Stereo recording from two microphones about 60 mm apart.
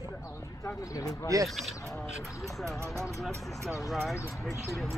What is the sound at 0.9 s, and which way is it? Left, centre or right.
Speech, left.